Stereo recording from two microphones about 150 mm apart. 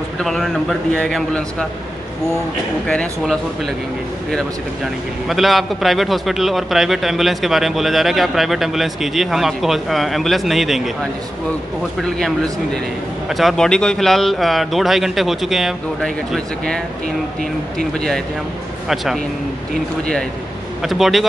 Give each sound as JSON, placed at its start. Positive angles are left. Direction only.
{"t": 0.2, "sound": "a man's voice", "side_deg": 0}
{"t": 2.9, "sound": "speech", "side_deg": 10}
{"t": 5.3, "sound": "a man's voice", "side_deg": 0}
{"t": 13.3, "sound": "a man's voice", "side_deg": 0}
{"t": 20.8, "sound": "a man's voice", "side_deg": 0}